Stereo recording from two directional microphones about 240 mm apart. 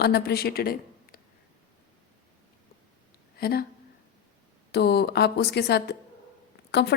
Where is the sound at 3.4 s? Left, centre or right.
Left.